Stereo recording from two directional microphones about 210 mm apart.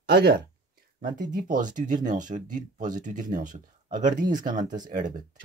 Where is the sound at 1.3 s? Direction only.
40° right (ahead or behind).